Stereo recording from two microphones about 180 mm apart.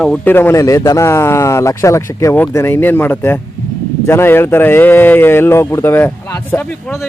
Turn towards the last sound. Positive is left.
turn(degrees=10)  # may be behind; listen again after turning